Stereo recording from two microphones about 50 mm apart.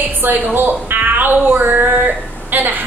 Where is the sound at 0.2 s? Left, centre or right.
Right.